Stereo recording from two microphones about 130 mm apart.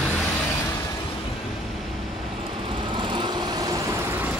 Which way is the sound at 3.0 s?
35° right (ahead or behind).